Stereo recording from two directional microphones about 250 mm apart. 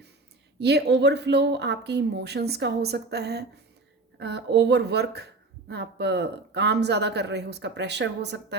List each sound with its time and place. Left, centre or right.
0.6 s speech: right